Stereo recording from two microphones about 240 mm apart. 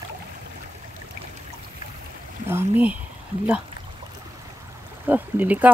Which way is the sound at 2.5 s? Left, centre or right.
Centre.